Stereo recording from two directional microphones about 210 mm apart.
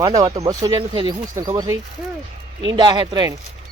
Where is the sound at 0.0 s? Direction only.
20° right (ahead or behind).